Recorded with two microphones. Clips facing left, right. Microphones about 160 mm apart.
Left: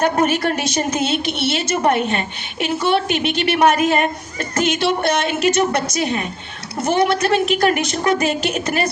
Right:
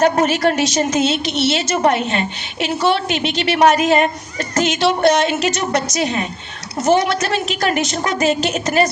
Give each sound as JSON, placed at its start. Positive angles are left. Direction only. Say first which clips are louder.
{"t": 0.0, "sound": "a woman's voice", "louder": "right 3 dB", "side_deg": 55}